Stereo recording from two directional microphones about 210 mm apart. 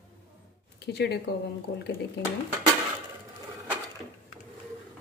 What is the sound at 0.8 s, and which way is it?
Speech, 50° left (ahead or behind).